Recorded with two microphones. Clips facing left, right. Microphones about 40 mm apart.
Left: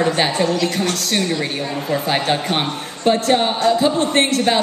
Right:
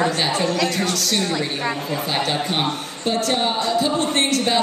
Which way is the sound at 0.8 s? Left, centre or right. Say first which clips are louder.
Left 2 dB; left.